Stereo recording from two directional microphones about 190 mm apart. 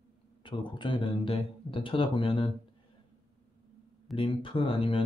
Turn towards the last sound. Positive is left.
turn(degrees=30)  # may be behind; listen again after turning